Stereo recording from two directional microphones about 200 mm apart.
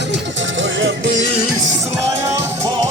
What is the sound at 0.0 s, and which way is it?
Music, 65° right (ahead or behind).